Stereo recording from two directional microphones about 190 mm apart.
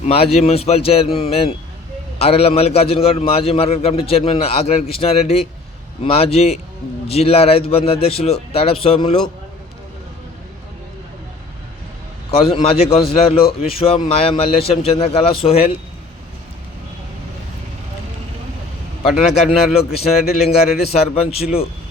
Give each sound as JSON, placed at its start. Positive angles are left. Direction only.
{"t": 0.3, "sound": "a man's voice", "side_deg": 30}
{"t": 12.5, "sound": "a man's voice", "side_deg": 30}
{"t": 19.3, "sound": "a man's voice", "side_deg": 35}